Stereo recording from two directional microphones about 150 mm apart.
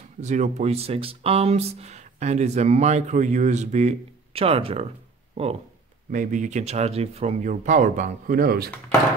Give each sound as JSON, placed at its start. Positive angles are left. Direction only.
{"t": 0.2, "sound": "speech", "side_deg": -50}
{"t": 6.1, "sound": "speech", "side_deg": -60}